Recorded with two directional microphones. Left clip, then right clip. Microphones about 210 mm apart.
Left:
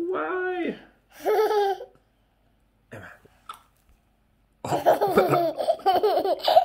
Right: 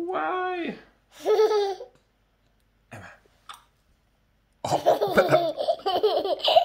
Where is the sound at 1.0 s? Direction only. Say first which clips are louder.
Right 1 dB; centre (ahead or behind).